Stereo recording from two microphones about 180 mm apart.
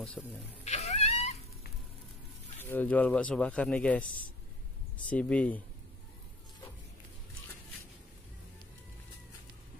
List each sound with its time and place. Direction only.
0.2 s speech: centre (ahead or behind)
0.7 s a sound: 35° left (ahead or behind)
2.6 s speech: 10° left (ahead or behind)
5.1 s speech: 5° left (ahead or behind)